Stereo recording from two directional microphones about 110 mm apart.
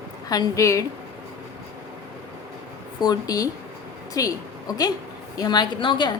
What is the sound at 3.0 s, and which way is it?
A woman's voice, 35° left (ahead or behind).